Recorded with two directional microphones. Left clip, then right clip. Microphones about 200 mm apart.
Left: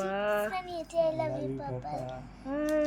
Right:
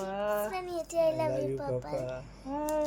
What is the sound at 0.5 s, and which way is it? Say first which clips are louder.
A child's voice: even; 35° right (ahead or behind).